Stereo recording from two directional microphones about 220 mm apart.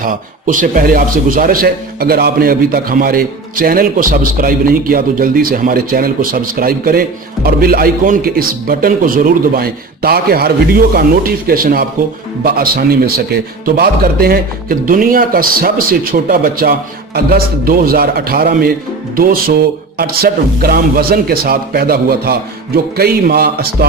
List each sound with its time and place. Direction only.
0.0 s a man's voice: 40° right (ahead or behind)